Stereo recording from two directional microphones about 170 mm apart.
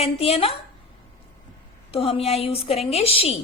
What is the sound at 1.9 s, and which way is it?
A woman's voice, 35° left (ahead or behind).